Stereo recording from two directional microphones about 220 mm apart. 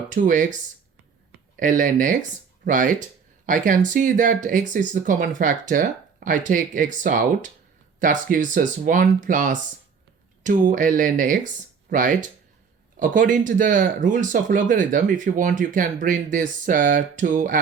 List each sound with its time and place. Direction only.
0.1 s speech: 35° right (ahead or behind)
1.5 s speech: 40° right (ahead or behind)